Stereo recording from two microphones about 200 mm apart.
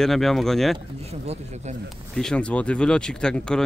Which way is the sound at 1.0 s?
30° right (ahead or behind).